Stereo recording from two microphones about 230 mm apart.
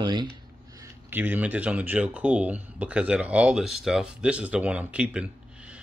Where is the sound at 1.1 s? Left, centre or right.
Centre.